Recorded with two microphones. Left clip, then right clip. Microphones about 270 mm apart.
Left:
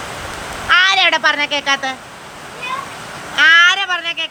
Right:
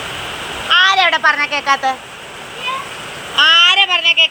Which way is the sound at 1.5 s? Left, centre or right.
Centre.